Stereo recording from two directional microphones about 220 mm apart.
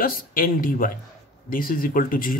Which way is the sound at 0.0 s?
40° left (ahead or behind).